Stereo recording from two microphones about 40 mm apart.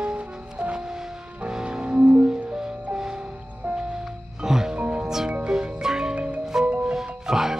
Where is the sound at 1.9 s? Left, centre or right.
Right.